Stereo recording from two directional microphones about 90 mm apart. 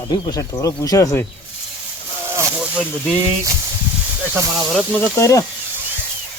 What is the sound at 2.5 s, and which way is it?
Snake, 15° right (ahead or behind).